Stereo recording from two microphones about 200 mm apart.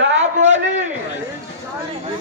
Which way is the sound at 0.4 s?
35° right (ahead or behind).